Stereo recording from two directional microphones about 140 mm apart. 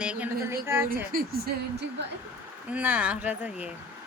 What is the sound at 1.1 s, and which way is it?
Speech, 90° right.